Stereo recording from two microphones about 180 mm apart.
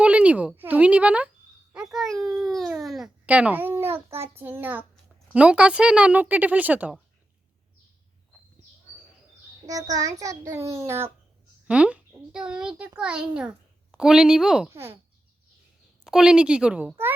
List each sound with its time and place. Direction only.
0.0 s a child's voice: 5° right (ahead or behind)
9.9 s a child's voice: 20° right (ahead or behind); by 14.7 s 5° right (ahead or behind)
14.7 s a child's voice: 15° right (ahead or behind)
16.0 s a child's voice: 5° right (ahead or behind)